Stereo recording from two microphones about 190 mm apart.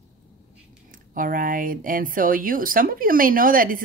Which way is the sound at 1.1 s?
45° right (ahead or behind).